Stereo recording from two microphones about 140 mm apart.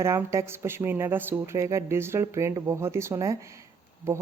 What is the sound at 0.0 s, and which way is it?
Speech, 20° right (ahead or behind).